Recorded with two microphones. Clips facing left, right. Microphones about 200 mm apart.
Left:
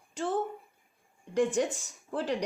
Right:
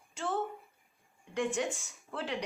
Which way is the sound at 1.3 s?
40° left (ahead or behind).